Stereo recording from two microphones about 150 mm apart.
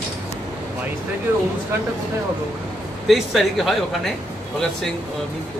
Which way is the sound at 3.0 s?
Centre (ahead or behind).